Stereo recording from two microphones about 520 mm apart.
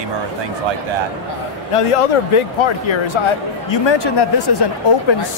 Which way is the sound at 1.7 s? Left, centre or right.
Left.